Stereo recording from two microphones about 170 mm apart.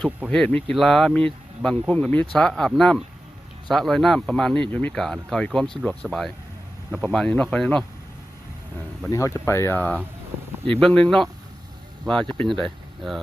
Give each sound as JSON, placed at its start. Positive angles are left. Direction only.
{"t": 0.3, "sound": "speech", "side_deg": 5}
{"t": 9.0, "sound": "speech", "side_deg": 20}